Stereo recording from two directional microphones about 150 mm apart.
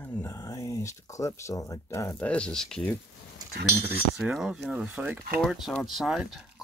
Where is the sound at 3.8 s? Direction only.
5° right (ahead or behind).